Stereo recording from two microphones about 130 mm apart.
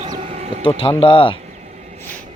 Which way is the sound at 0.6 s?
40° left (ahead or behind).